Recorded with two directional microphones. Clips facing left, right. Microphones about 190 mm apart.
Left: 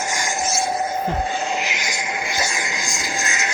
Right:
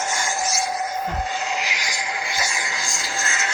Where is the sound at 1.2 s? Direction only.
55° left (ahead or behind).